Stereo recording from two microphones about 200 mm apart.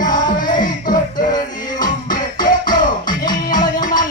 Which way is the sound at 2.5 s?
45° left (ahead or behind).